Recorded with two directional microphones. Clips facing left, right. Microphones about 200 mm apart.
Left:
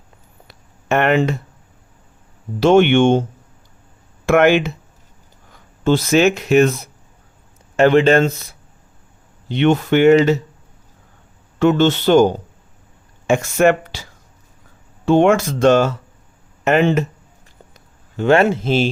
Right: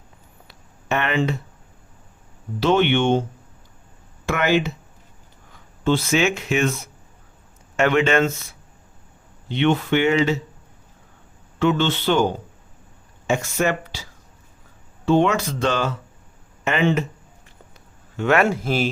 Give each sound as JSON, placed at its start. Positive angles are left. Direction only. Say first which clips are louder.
{"t": 0.4, "sound": "a sound", "louder": "left 5 dB", "side_deg": 50}
{"t": 2.6, "sound": "speech", "louder": "left 7 dB", "side_deg": 50}
{"t": 4.3, "sound": "speech", "louder": "left 7 dB", "side_deg": 60}
{"t": 5.8, "sound": "speech", "louder": "left 5 dB", "side_deg": 40}
{"t": 11.6, "sound": "speech", "louder": "left 6 dB", "side_deg": 45}
{"t": 18.2, "sound": "speech", "louder": "left 5 dB", "side_deg": 30}